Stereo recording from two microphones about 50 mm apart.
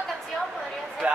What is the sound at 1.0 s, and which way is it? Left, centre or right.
Speech, right.